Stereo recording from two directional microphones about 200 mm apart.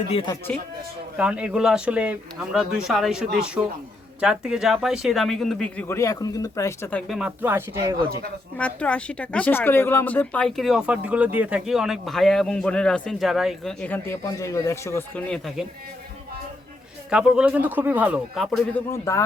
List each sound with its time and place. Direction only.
0.1 s speech: 25° left (ahead or behind)
1.1 s speech: 5° right (ahead or behind); by 7.0 s 15° left (ahead or behind)
7.1 s speech: 5° right (ahead or behind)
8.5 s speech: 5° left (ahead or behind)
17.1 s speech: 5° right (ahead or behind)